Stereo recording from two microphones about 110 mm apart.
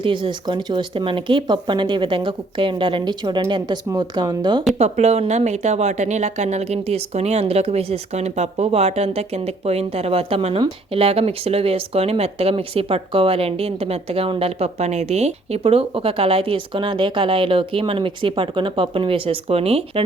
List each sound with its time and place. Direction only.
0.0 s speech: 50° right (ahead or behind)
4.8 s a woman's voice: 80° right; by 20.0 s 65° right (ahead or behind)